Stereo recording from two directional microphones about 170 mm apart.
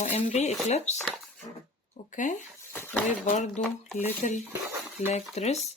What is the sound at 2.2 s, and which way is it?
Speech, 50° left (ahead or behind).